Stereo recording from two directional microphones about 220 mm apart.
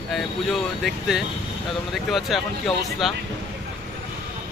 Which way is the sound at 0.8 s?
Centre (ahead or behind).